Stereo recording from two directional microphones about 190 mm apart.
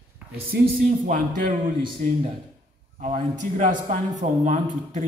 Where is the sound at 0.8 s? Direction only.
45° right (ahead or behind).